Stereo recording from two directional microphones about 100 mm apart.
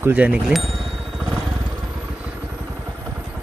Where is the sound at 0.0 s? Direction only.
15° right (ahead or behind).